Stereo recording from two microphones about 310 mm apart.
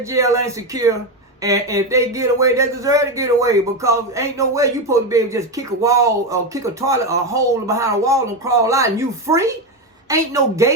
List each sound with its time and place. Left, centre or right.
0.0 s speech: centre